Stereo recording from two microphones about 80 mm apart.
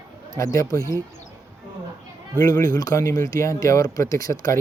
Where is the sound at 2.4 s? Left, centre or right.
Left.